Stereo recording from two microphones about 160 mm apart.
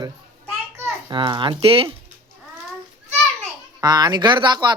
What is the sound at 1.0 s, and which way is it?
Speech, 30° right (ahead or behind).